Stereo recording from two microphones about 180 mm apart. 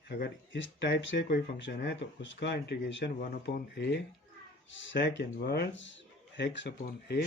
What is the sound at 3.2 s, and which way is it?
Speech, 55° left (ahead or behind).